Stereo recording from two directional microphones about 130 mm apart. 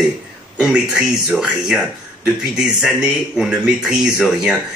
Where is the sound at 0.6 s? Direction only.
5° right (ahead or behind).